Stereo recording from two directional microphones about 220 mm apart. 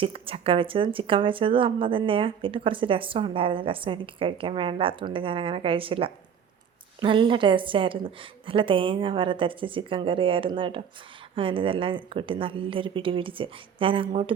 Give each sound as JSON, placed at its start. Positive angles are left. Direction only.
{"t": 0.0, "sound": "speech", "side_deg": -25}